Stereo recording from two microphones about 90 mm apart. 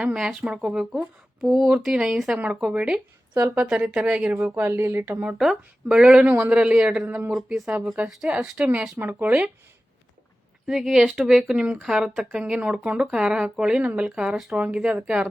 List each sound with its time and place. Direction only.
0.0 s speech: 10° right (ahead or behind); by 5.2 s 25° right (ahead or behind)
5.4 s speech: 5° right (ahead or behind)
10.7 s speech: 5° right (ahead or behind)